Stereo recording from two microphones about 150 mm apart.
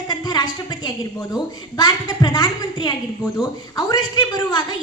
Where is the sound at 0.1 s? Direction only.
25° left (ahead or behind).